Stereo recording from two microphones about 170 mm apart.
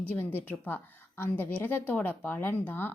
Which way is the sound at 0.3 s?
10° left (ahead or behind).